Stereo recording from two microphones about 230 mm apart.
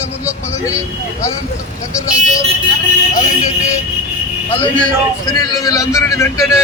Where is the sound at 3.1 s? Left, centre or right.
Left.